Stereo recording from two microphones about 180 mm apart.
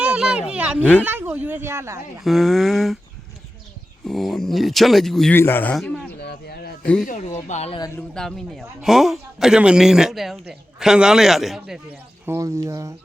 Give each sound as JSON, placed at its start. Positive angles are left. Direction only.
{"t": 0.0, "sound": "a sound", "side_deg": -5}
{"t": 0.8, "sound": "speech", "side_deg": 10}
{"t": 1.0, "sound": "speech", "side_deg": -10}
{"t": 2.2, "sound": "a man's voice", "side_deg": 0}
{"t": 4.0, "sound": "a man's voice", "side_deg": 0}
{"t": 6.2, "sound": "a sound", "side_deg": 60}
{"t": 7.0, "sound": "speech", "side_deg": 45}
{"t": 7.9, "sound": "a man's voice", "side_deg": 5}
{"t": 12.2, "sound": "speech", "side_deg": -15}